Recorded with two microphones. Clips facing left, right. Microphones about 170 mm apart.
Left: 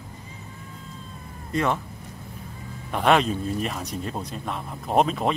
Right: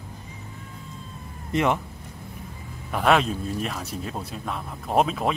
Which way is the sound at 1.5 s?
20° right (ahead or behind).